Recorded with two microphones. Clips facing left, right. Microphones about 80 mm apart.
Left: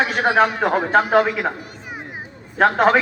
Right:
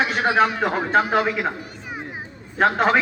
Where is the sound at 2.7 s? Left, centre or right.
Left.